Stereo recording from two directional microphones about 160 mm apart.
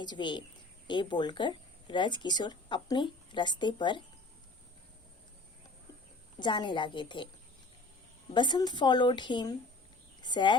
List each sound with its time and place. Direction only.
0.0 s a woman's voice: 30° left (ahead or behind)
6.4 s a woman's voice: 30° left (ahead or behind)
8.3 s a woman's voice: 30° left (ahead or behind)